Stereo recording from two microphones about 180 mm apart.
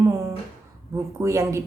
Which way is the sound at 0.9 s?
15° right (ahead or behind).